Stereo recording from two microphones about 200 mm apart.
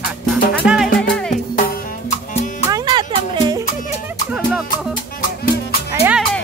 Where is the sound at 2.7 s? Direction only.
20° right (ahead or behind).